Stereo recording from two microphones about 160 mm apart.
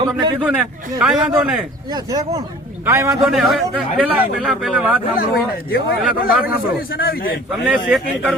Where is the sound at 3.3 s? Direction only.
Centre (ahead or behind).